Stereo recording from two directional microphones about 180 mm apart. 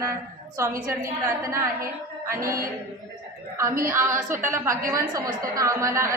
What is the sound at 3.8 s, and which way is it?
A woman's voice, 15° right (ahead or behind).